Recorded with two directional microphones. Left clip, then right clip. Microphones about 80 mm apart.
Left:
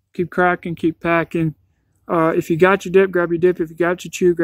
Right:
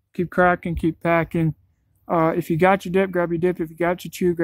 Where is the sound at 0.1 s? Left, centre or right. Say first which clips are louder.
Left 1 dB; right.